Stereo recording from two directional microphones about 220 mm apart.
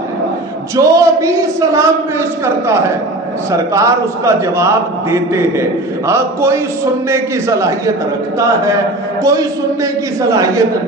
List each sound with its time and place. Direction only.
0.8 s a man's voice: 15° right (ahead or behind)